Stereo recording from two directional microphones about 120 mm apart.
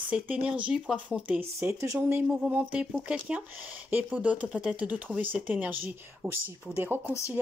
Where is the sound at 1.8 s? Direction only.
20° right (ahead or behind).